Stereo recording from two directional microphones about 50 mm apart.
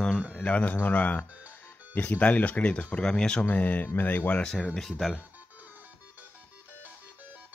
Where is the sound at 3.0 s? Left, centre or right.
Centre.